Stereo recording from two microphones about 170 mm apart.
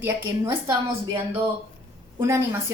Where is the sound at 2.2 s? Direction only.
15° right (ahead or behind).